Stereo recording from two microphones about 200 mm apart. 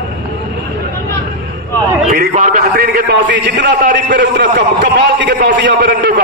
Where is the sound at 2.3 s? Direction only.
40° right (ahead or behind); by 5.7 s 60° right (ahead or behind).